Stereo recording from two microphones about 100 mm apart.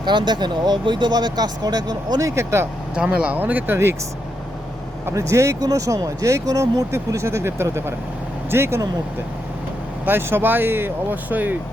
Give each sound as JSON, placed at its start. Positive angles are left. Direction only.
{"t": 0.0, "sound": "speech", "side_deg": -50}
{"t": 2.9, "sound": "speech", "side_deg": -10}
{"t": 5.0, "sound": "speech", "side_deg": -30}
{"t": 10.1, "sound": "speech", "side_deg": -20}